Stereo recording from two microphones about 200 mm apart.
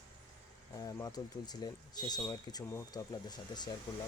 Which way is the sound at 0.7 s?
20° left (ahead or behind).